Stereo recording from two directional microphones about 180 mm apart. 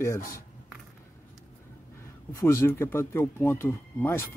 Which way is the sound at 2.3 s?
15° left (ahead or behind).